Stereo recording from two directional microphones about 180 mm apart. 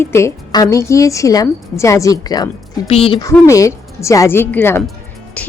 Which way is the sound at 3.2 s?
15° left (ahead or behind).